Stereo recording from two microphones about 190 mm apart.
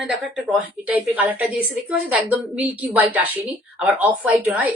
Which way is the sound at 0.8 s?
10° right (ahead or behind).